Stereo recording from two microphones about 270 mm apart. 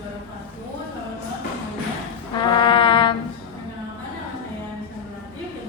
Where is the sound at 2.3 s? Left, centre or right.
Centre.